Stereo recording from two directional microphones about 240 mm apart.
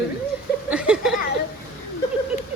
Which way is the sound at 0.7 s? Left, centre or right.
Centre.